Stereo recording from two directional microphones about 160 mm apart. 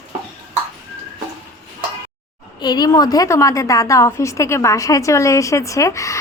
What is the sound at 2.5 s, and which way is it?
A woman's voice, 25° left (ahead or behind).